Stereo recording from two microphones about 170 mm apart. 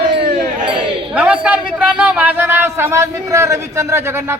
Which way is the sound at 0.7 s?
30° right (ahead or behind).